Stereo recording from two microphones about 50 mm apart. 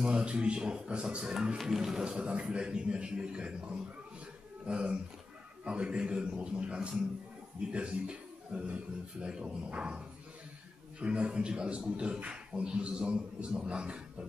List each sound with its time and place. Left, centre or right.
0.0 s a man's voice: right
2.1 s a man's voice: right